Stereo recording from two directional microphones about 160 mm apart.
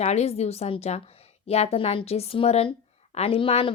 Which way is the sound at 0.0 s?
40° left (ahead or behind).